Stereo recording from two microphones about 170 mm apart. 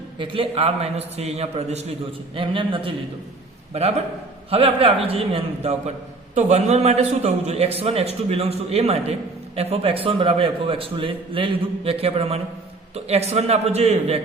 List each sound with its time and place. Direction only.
0.2 s a man's voice: 35° right (ahead or behind)
4.5 s a man's voice: 35° right (ahead or behind)